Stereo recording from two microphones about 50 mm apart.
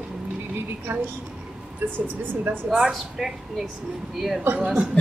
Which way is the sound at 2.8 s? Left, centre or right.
Centre.